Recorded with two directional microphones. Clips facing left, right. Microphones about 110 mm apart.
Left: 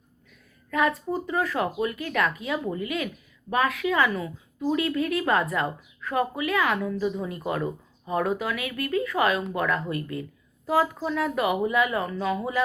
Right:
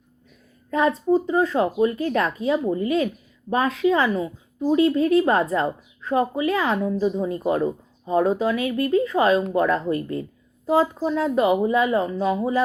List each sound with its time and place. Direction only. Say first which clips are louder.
0.7 s speech: right 6 dB; 25° right (ahead or behind)